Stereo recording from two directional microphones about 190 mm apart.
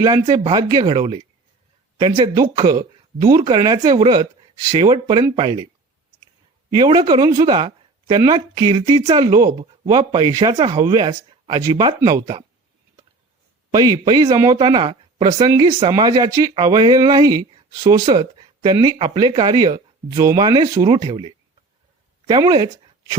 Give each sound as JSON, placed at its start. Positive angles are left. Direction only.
{"t": 0.0, "sound": "speech", "side_deg": -20}
{"t": 6.7, "sound": "speech", "side_deg": -20}
{"t": 13.7, "sound": "speech", "side_deg": -20}